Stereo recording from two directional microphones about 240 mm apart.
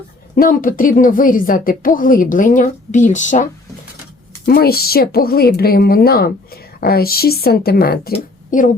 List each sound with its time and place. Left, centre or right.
0.3 s a woman's voice: left